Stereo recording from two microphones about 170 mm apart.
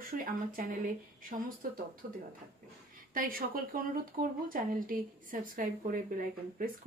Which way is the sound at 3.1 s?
55° right (ahead or behind).